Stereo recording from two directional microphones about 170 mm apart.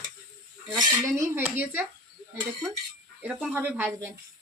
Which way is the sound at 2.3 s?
25° right (ahead or behind).